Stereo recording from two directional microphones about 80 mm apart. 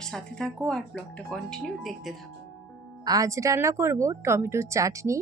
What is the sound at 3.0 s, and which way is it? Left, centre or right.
Speech, right.